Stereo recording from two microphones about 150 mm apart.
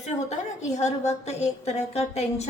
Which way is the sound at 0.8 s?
50° left (ahead or behind).